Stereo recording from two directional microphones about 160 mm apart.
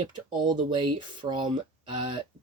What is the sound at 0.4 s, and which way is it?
Speech, 30° right (ahead or behind).